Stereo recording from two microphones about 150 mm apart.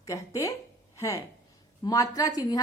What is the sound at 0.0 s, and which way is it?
A woman's voice, 20° left (ahead or behind).